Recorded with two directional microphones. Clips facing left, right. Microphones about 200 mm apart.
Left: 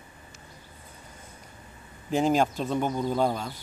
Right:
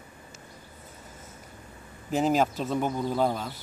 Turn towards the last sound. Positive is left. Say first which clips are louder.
# left 1 dB
turn(degrees=0)  # may be behind; listen again after turning